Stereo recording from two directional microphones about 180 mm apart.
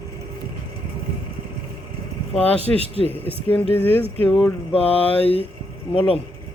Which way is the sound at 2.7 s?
10° left (ahead or behind).